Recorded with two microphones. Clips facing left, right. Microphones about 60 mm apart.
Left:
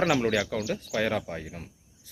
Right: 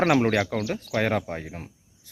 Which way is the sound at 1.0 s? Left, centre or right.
Right.